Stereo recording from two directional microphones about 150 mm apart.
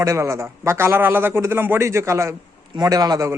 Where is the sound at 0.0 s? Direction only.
20° right (ahead or behind).